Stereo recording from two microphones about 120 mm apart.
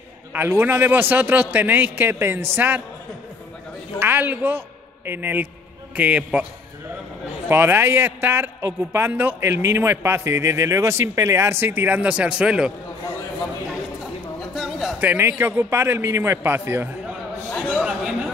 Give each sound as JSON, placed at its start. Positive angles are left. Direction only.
{"t": 0.3, "sound": "a man's voice", "side_deg": -15}
{"t": 4.0, "sound": "a man's voice", "side_deg": -15}
{"t": 7.4, "sound": "a man's voice", "side_deg": -20}
{"t": 14.5, "sound": "a sound", "side_deg": 0}
{"t": 15.0, "sound": "a man's voice", "side_deg": -15}
{"t": 17.5, "sound": "a sound", "side_deg": 10}
{"t": 17.8, "sound": "chatter", "side_deg": -5}